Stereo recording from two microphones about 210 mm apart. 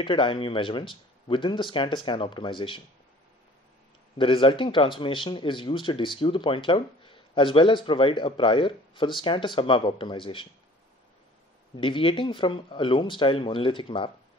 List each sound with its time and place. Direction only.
0.0 s speech: 25° left (ahead or behind)
4.2 s speech: 25° left (ahead or behind)
11.7 s speech: 25° left (ahead or behind)